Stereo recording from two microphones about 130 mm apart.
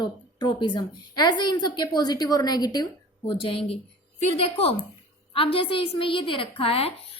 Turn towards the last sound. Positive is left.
turn(degrees=50)  # may be behind; listen again after turning